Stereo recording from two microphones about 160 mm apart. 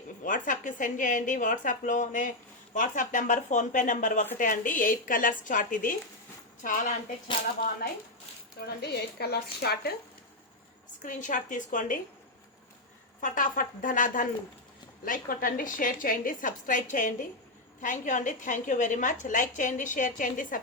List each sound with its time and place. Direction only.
0.2 s a woman's voice: 55° left (ahead or behind)
8.6 s speech: 90° left
11.0 s a woman's voice: 55° left (ahead or behind)
13.2 s a woman's voice: 55° left (ahead or behind)